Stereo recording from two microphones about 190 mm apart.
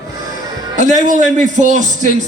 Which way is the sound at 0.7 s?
40° right (ahead or behind).